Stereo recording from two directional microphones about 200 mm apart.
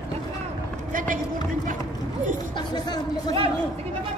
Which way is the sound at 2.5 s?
20° left (ahead or behind).